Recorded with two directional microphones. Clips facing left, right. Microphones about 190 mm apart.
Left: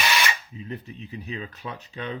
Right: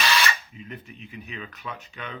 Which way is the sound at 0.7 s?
35° left (ahead or behind).